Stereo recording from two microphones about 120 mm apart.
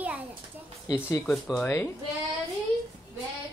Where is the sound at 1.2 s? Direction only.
5° left (ahead or behind).